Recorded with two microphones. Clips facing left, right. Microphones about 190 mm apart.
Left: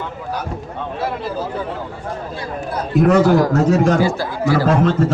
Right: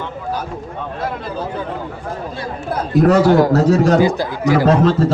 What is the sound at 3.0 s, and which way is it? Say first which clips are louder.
Speech: right 1 dB; 35° right (ahead or behind).